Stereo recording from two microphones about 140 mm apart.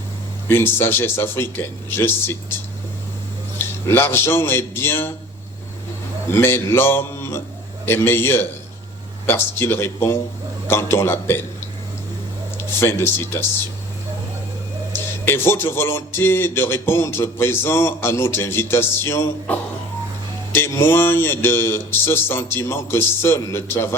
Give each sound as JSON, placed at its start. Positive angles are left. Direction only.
{"t": 0.4, "sound": "speech", "side_deg": 15}
{"t": 3.6, "sound": "speech", "side_deg": 15}
{"t": 6.2, "sound": "a man's voice", "side_deg": 15}
{"t": 12.5, "sound": "speech", "side_deg": 15}
{"t": 14.9, "sound": "speech", "side_deg": 15}